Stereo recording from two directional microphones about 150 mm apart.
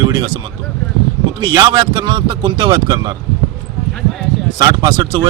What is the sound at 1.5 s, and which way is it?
Speech, 25° right (ahead or behind).